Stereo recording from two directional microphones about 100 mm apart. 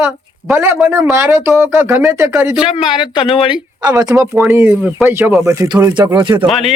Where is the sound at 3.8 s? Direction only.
40° right (ahead or behind).